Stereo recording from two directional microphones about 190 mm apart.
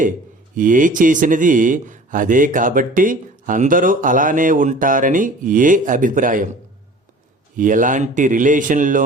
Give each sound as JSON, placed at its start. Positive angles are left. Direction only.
{"t": 0.5, "sound": "speech", "side_deg": -45}
{"t": 7.5, "sound": "speech", "side_deg": -45}